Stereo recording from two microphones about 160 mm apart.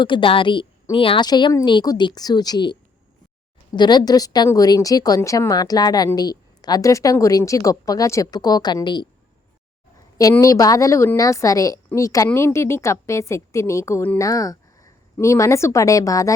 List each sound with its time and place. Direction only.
0.0 s a woman's voice: 30° left (ahead or behind)
10.4 s a woman's voice: 20° left (ahead or behind)